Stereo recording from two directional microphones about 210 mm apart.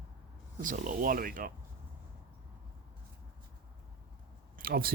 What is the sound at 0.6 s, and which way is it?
Speech, 40° right (ahead or behind).